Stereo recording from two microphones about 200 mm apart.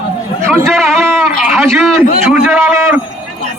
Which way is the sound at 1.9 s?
10° right (ahead or behind).